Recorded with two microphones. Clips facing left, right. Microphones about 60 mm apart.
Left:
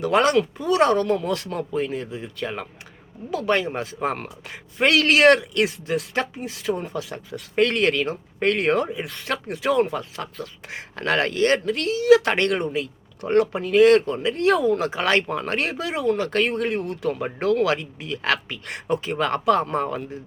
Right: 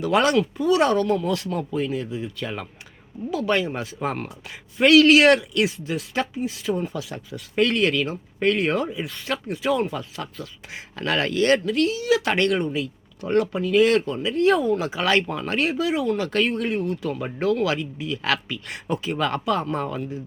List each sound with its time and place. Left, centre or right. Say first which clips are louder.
0.0 s a woman's voice: left 1 dB; left
11.3 s speech: right 4 dB; left
11.6 s a woman's voice: right 1 dB; left
19.7 s speech: left 2 dB; left